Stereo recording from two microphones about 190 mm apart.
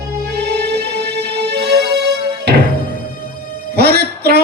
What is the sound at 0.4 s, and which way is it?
Music, 60° right (ahead or behind).